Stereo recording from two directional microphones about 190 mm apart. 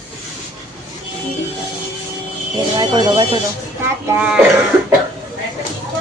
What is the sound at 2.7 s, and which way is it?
Speech, 25° right (ahead or behind).